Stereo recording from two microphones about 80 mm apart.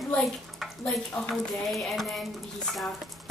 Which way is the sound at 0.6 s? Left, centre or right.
Centre.